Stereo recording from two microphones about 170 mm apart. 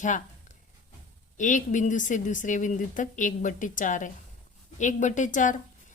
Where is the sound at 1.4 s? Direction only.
45° left (ahead or behind).